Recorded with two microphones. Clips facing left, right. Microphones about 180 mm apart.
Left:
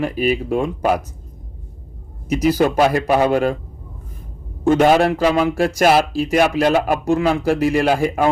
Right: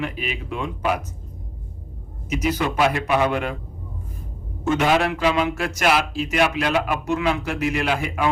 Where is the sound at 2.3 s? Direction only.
35° left (ahead or behind).